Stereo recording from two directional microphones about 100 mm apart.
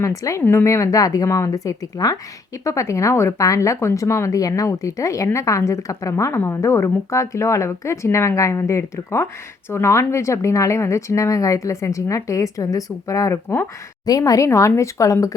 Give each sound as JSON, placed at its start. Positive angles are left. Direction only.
{"t": 0.0, "sound": "a woman's voice", "side_deg": 35}
{"t": 14.0, "sound": "a woman's voice", "side_deg": 35}